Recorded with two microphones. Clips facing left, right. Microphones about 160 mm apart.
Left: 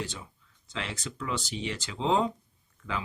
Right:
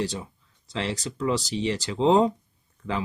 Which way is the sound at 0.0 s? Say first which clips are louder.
Right 8 dB; 35° right (ahead or behind).